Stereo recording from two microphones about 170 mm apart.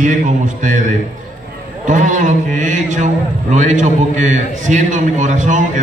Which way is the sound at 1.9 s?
45° right (ahead or behind).